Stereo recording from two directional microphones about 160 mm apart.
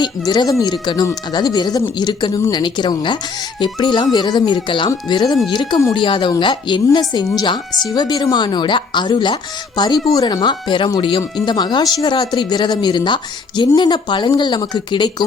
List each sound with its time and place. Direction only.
0.0 s speech: 25° left (ahead or behind)
7.7 s speech: centre (ahead or behind)
7.9 s speech: 25° left (ahead or behind)